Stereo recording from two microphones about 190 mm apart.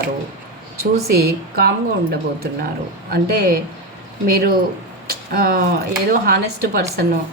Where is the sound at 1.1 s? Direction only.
55° right (ahead or behind).